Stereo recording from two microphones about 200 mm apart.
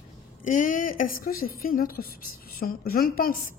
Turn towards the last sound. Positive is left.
turn(degrees=45)  # may be behind; listen again after turning